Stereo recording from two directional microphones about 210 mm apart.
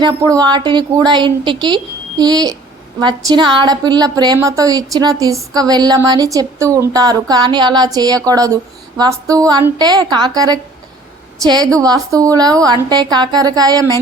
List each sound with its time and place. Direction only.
0.0 s a woman's voice: 15° right (ahead or behind)